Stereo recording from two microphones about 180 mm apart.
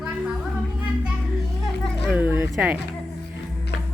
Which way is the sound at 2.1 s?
10° right (ahead or behind).